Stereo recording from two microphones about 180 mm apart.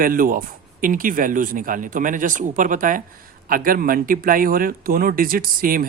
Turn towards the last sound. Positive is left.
turn(degrees=-50)  # may be behind; listen again after turning